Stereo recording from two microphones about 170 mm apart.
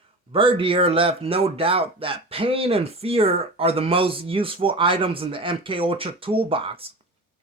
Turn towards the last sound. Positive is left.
turn(degrees=-35)  # may be behind; listen again after turning